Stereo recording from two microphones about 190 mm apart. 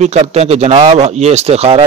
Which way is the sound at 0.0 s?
35° right (ahead or behind).